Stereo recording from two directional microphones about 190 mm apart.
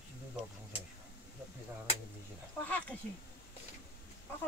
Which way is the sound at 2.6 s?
10° left (ahead or behind).